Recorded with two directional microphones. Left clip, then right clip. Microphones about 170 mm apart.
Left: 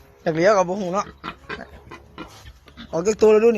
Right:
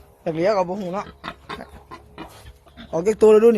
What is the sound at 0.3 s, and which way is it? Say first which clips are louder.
Speech: left 3 dB; 15° left (ahead or behind).